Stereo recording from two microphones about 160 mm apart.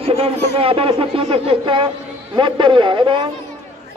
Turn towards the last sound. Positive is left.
turn(degrees=-30)  # may be behind; listen again after turning